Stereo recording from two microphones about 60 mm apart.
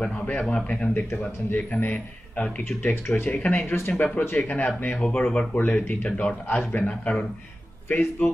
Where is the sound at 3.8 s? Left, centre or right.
Left.